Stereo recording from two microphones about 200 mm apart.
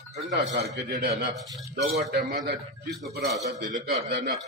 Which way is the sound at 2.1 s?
55° right (ahead or behind).